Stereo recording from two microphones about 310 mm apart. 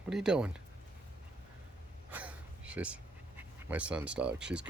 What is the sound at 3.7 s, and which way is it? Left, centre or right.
Speech, centre.